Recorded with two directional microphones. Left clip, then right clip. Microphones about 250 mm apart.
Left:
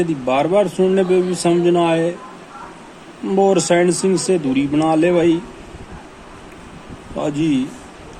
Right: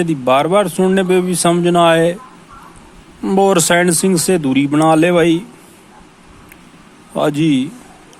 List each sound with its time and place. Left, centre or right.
0.0 s speech: right
3.2 s speech: right
7.2 s speech: right